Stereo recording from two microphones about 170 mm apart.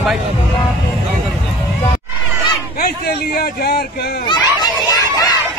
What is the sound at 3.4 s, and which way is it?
Speech, 70° left (ahead or behind).